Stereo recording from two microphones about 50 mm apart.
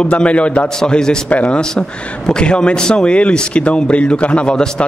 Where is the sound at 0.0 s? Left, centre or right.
Left.